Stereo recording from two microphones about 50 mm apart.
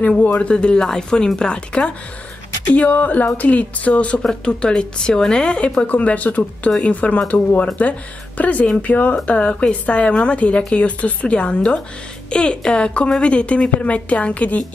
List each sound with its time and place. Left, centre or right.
0.3 s a woman's voice: left
2.7 s a woman's voice: left